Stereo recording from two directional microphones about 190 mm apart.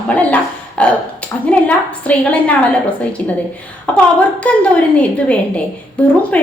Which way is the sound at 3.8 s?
5° left (ahead or behind).